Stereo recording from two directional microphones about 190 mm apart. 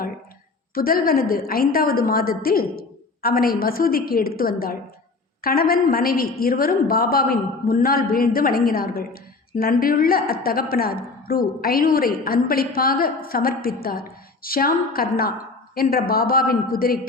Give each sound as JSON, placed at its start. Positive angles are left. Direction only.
{"t": 0.7, "sound": "a woman's voice", "side_deg": 50}